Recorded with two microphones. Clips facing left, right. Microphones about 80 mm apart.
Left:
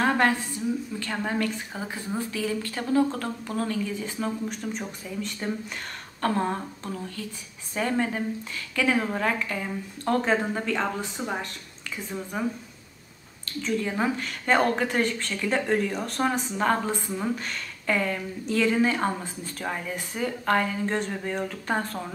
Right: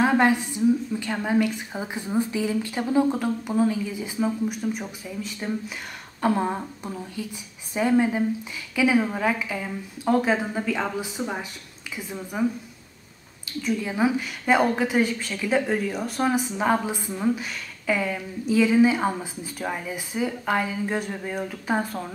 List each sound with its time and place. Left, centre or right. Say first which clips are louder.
0.0 s a woman's voice: right 3 dB; centre
13.5 s a woman's voice: right 1 dB; centre